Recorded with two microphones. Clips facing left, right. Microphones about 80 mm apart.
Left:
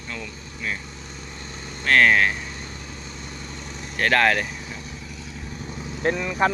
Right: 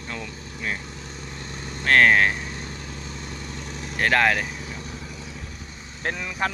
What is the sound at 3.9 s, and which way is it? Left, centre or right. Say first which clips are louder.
Speech: left 1 dB; centre.